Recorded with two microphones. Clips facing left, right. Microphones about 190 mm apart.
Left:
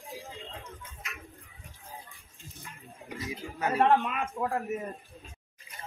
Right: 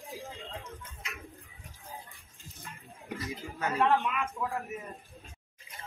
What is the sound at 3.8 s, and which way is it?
Speech, 45° left (ahead or behind).